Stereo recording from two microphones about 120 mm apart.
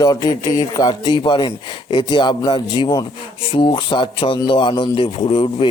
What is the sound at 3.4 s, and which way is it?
A man's voice, 50° left (ahead or behind).